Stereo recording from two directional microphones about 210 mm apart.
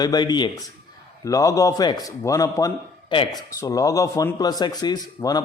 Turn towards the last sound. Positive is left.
turn(degrees=20)  # may be behind; listen again after turning